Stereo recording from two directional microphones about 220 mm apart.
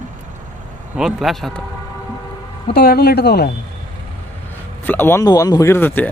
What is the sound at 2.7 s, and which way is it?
Speech, 45° left (ahead or behind).